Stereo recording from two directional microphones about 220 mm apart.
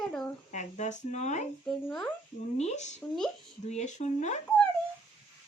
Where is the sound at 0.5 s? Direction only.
35° left (ahead or behind).